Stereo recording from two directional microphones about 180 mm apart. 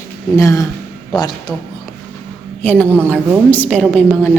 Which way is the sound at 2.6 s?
10° left (ahead or behind).